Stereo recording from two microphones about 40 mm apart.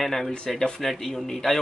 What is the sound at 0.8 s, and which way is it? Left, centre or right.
Speech, centre.